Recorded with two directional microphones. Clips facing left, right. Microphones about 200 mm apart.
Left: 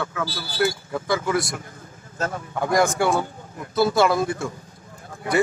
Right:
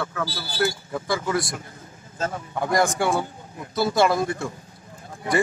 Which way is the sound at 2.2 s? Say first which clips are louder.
Left 1 dB; 15° right (ahead or behind).